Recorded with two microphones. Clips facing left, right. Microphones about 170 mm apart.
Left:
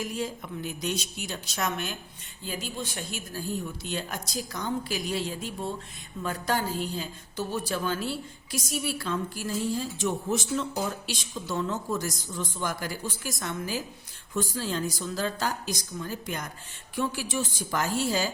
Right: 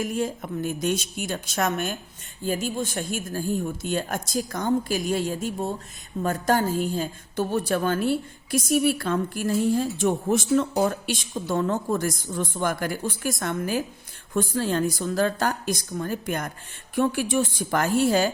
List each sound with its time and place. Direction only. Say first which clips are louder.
0.0 s a woman's voice: right 6 dB; 50° right (ahead or behind)